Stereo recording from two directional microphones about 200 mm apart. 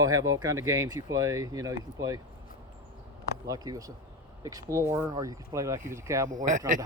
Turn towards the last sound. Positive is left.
turn(degrees=-40)  # may be behind; listen again after turning